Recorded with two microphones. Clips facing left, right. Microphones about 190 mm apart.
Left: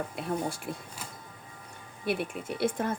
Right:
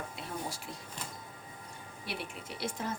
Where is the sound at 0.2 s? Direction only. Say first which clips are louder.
Left 9 dB; 55° left (ahead or behind).